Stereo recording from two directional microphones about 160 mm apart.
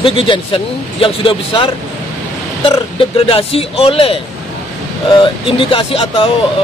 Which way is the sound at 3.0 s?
35° left (ahead or behind).